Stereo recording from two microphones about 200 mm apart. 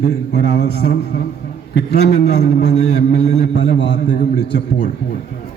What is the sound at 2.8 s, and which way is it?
Speech, 35° left (ahead or behind).